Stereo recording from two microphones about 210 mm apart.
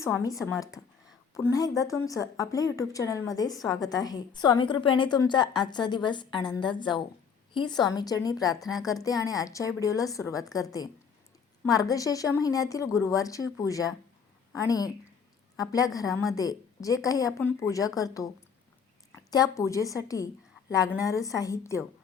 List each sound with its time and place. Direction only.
0.2 s a woman's voice: 15° left (ahead or behind)
8.5 s speech: centre (ahead or behind)
9.0 s speech: 15° left (ahead or behind)
19.3 s a woman's voice: 15° left (ahead or behind)